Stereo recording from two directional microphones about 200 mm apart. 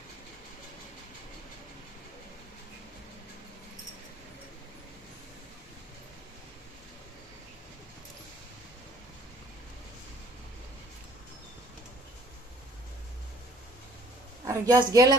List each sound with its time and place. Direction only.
14.4 s a woman's voice: 20° right (ahead or behind)